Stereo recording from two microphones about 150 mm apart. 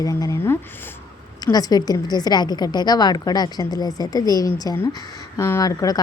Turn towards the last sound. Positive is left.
turn(degrees=25)  # may be behind; listen again after turning